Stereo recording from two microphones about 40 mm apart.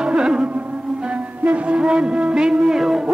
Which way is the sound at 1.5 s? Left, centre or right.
Right.